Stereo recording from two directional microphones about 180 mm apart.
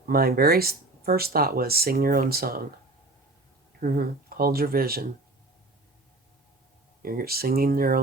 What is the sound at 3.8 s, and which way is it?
Speech, 55° right (ahead or behind).